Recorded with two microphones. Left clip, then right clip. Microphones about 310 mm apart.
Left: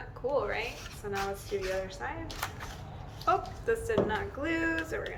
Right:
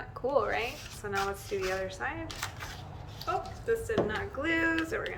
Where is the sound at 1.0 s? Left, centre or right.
Centre.